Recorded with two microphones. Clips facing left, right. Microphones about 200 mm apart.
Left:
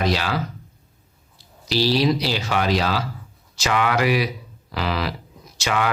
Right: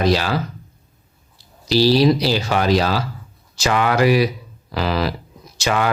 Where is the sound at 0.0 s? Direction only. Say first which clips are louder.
Right 5 dB; 35° right (ahead or behind).